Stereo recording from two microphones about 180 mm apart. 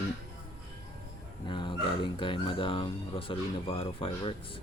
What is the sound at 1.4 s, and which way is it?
Speech, 25° left (ahead or behind).